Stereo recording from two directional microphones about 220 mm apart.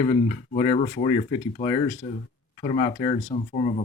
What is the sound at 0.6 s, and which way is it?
Speech, 25° left (ahead or behind).